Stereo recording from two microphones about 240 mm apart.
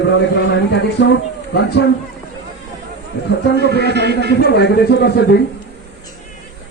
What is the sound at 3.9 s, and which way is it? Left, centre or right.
Speech, right.